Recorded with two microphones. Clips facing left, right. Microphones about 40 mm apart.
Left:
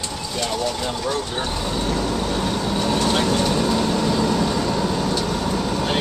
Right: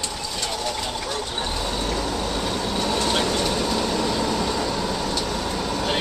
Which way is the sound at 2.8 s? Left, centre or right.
Centre.